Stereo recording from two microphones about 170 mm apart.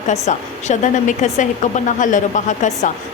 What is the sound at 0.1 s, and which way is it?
A woman's voice, 45° left (ahead or behind).